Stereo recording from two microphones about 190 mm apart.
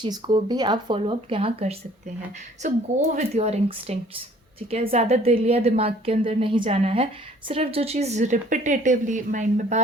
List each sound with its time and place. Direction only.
0.0 s a woman's voice: 25° right (ahead or behind); by 9.8 s 40° right (ahead or behind)